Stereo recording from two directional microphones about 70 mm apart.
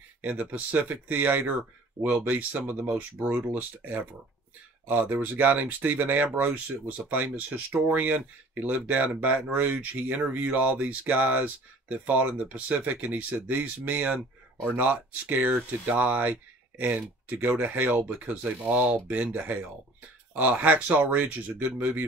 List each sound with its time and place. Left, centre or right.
0.2 s speech: right